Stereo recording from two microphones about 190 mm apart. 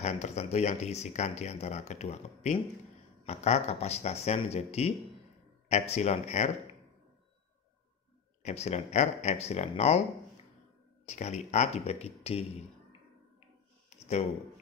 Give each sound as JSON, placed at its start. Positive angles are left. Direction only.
{"t": 0.0, "sound": "speech", "side_deg": 35}
{"t": 8.4, "sound": "speech", "side_deg": 35}
{"t": 11.1, "sound": "speech", "side_deg": 35}
{"t": 13.8, "sound": "a sound", "side_deg": 35}